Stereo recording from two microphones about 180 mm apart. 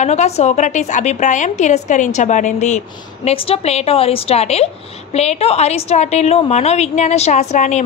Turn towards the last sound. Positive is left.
turn(degrees=40)  # may be behind; listen again after turning